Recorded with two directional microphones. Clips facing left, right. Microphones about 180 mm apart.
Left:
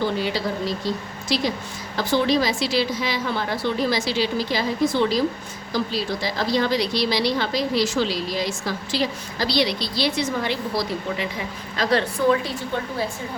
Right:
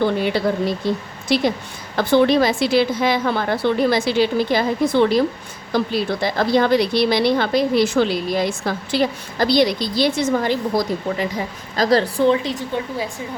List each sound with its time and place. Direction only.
0.0 s a woman's voice: 55° right (ahead or behind); by 13.1 s 15° right (ahead or behind)